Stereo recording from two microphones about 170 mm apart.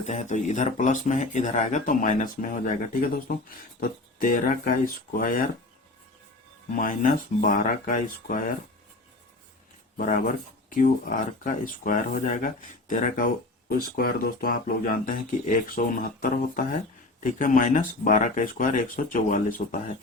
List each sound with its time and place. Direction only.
0.1 s speech: 45° left (ahead or behind)
6.7 s speech: 50° left (ahead or behind)
10.0 s speech: 50° left (ahead or behind)